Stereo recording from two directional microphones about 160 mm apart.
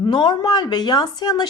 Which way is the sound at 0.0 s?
30° left (ahead or behind).